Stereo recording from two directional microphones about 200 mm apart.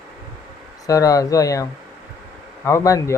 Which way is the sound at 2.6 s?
15° left (ahead or behind).